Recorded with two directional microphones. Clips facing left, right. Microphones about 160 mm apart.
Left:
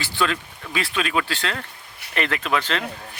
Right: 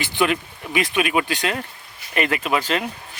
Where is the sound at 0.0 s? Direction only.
20° right (ahead or behind).